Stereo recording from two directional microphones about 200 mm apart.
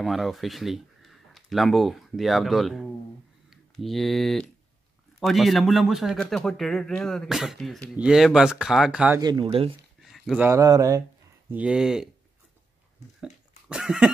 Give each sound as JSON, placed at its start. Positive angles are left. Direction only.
{"t": 0.0, "sound": "speech", "side_deg": 0}
{"t": 9.2, "sound": "speech", "side_deg": -25}
{"t": 10.0, "sound": "a sound", "side_deg": 0}
{"t": 10.5, "sound": "speech", "side_deg": -20}
{"t": 11.5, "sound": "speech", "side_deg": -5}
{"t": 13.2, "sound": "cough", "side_deg": -5}